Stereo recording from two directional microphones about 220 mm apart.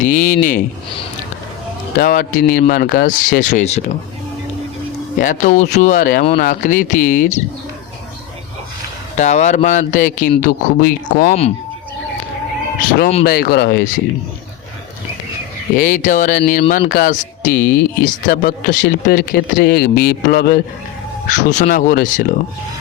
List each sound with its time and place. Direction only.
0.0 s speech: 35° left (ahead or behind)
2.0 s speech: 40° left (ahead or behind)
5.2 s speech: 35° left (ahead or behind)
9.1 s speech: 30° left (ahead or behind)
13.2 s speech: 45° left (ahead or behind)
15.7 s speech: 40° left (ahead or behind)